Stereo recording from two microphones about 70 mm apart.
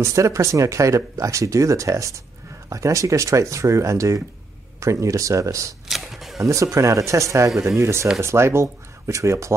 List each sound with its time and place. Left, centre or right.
0.0 s speech: right
5.9 s camera: centre
6.4 s speech: right